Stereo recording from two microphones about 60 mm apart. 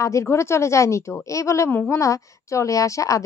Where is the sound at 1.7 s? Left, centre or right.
Left.